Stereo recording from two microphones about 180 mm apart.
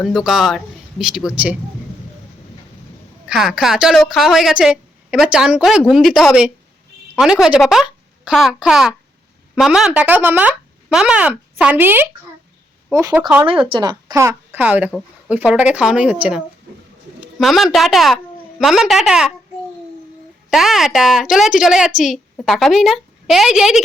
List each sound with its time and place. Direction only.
0.0 s speech: centre (ahead or behind)
3.2 s speech: 5° right (ahead or behind)
17.4 s speech: centre (ahead or behind)
20.5 s speech: centre (ahead or behind)